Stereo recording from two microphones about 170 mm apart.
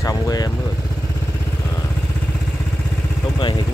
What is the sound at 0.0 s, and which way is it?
Vehicle, 20° left (ahead or behind).